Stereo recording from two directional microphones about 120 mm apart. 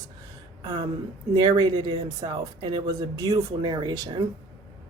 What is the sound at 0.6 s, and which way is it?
Speech, 30° right (ahead or behind).